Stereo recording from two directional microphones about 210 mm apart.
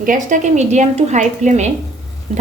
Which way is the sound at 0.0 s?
40° right (ahead or behind).